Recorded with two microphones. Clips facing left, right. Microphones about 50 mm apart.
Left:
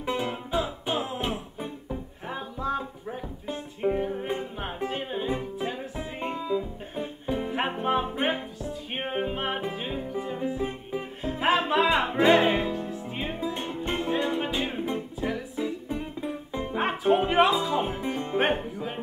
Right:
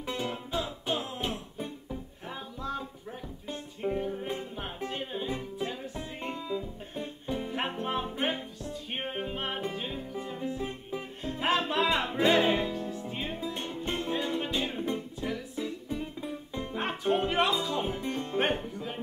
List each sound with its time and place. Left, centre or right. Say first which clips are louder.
0.0 s music: left 5 dB; centre